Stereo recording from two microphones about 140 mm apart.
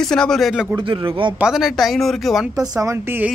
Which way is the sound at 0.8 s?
40° right (ahead or behind).